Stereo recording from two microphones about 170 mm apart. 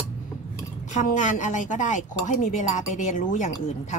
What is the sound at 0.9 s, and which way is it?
Speech, 45° left (ahead or behind).